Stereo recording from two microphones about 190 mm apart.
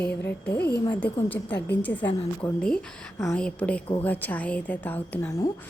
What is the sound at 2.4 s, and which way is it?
A woman's voice, 15° left (ahead or behind).